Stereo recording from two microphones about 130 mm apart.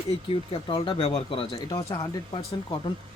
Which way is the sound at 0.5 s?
40° left (ahead or behind).